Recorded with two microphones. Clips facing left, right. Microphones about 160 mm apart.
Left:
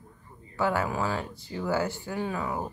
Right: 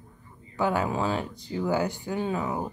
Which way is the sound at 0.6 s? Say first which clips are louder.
Right 1 dB; 20° right (ahead or behind).